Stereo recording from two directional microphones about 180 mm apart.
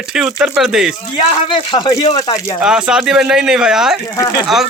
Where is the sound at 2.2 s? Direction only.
20° left (ahead or behind).